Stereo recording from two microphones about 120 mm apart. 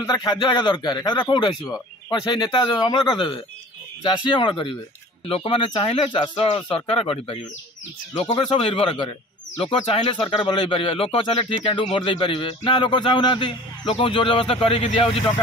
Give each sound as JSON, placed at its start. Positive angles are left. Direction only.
{"t": 0.0, "sound": "speech", "side_deg": 35}